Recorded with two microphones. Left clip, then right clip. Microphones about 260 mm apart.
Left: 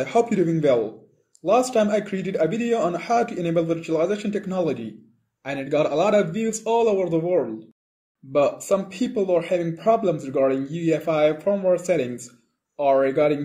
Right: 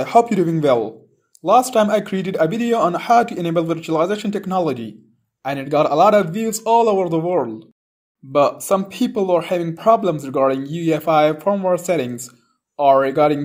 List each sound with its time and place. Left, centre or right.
0.0 s speech: right